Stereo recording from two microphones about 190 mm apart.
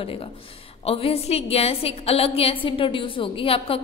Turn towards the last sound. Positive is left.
turn(degrees=30)  # may be behind; listen again after turning